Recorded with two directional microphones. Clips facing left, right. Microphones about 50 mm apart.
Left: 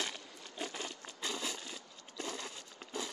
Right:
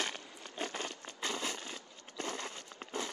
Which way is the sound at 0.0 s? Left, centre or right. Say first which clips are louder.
Right 2 dB; right.